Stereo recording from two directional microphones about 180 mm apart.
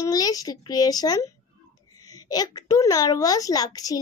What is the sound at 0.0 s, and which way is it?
A child's voice, 20° left (ahead or behind).